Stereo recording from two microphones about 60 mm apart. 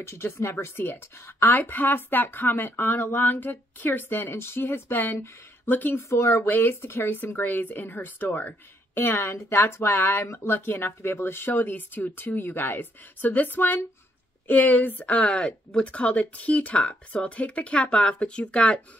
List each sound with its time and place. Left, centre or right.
0.0 s speech: left
5.9 s speech: left
6.4 s speech: left; by 18.8 s centre